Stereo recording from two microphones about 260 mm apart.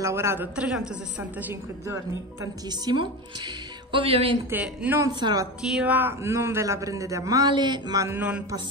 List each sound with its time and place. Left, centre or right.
0.0 s a man's voice: centre
4.5 s a man's voice: centre
5.6 s a man's voice: centre